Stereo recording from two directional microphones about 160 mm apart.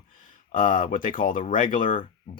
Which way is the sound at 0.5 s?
55° left (ahead or behind).